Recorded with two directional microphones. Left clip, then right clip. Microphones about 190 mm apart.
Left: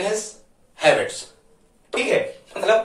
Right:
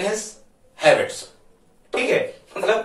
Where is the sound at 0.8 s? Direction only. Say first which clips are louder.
Right 1 dB; 25° left (ahead or behind).